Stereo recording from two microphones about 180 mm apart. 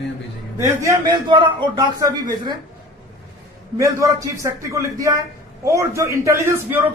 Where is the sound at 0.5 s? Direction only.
15° right (ahead or behind).